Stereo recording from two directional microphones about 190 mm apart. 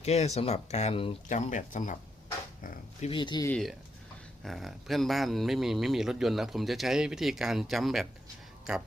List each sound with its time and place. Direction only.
0.0 s speech: 35° left (ahead or behind)
1.3 s speech: 40° left (ahead or behind)
3.1 s speech: 25° left (ahead or behind)
3.5 s speech: centre (ahead or behind)